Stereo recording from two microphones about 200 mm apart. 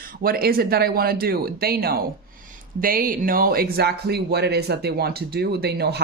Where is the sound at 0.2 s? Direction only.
50° right (ahead or behind).